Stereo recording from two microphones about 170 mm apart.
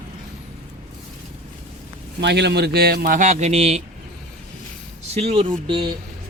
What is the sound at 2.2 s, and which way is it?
Speech, 85° right.